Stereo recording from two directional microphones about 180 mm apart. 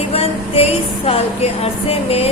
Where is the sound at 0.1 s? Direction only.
35° left (ahead or behind).